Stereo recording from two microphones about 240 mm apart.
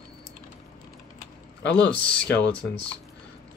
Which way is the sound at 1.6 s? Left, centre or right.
Left.